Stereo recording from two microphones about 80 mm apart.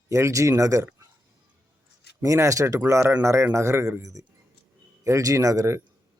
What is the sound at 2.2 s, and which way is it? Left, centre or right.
A man's voice, right.